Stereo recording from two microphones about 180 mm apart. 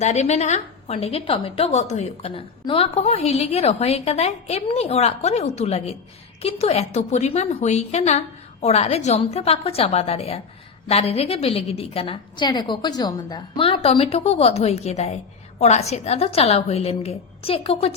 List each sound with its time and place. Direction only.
0.0 s a woman's voice: 40° left (ahead or behind)